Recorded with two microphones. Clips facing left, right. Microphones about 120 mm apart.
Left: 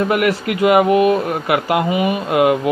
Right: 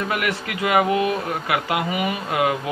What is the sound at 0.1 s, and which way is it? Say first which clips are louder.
Speech: left 8 dB; 30° left (ahead or behind).